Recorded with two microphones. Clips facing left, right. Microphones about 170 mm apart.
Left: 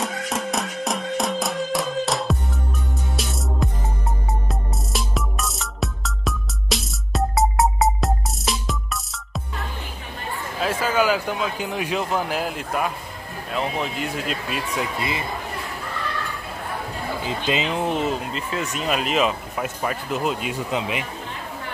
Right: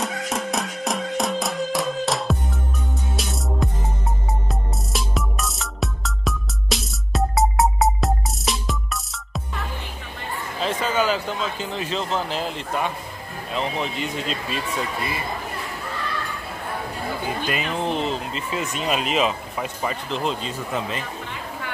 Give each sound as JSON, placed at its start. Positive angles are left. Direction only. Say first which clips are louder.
{"t": 0.0, "sound": "music", "louder": "even", "side_deg": 0}
{"t": 3.6, "sound": "music", "louder": "left 1 dB", "side_deg": 0}
{"t": 10.6, "sound": "speech", "louder": "left 1 dB", "side_deg": 5}
{"t": 15.0, "sound": "a man's voice", "louder": "left 1 dB", "side_deg": 20}
{"t": 17.3, "sound": "speech", "louder": "left 4 dB", "side_deg": 20}